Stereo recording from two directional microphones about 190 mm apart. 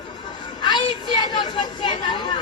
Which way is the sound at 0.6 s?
25° left (ahead or behind).